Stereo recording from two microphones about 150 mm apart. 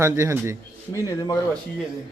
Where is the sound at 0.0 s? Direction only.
20° right (ahead or behind).